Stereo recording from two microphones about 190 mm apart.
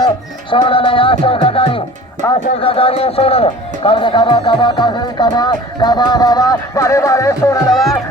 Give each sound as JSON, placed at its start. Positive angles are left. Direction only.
{"t": 0.5, "sound": "a man's voice", "side_deg": 25}
{"t": 7.7, "sound": "speech", "side_deg": 0}